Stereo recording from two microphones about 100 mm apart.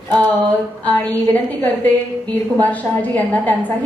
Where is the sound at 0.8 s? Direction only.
15° left (ahead or behind).